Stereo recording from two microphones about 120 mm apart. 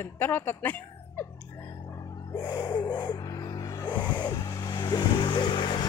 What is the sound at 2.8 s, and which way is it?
Music, 35° left (ahead or behind).